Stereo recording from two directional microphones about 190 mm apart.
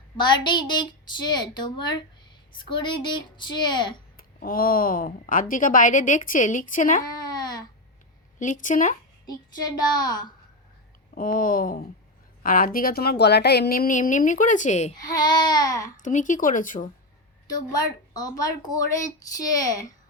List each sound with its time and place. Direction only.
0.2 s speech: 25° left (ahead or behind)
4.2 s speech: 50° left (ahead or behind)
7.0 s babbling: 20° left (ahead or behind)
8.6 s speech: 40° left (ahead or behind)
9.2 s speech: 20° left (ahead or behind)
11.1 s speech: 45° left (ahead or behind)
14.9 s speech: 20° left (ahead or behind)
16.0 s speech: 40° left (ahead or behind)
17.5 s speech: 20° left (ahead or behind)